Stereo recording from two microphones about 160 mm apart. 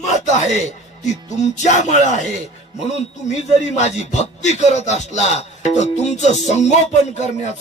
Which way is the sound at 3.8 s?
45° left (ahead or behind).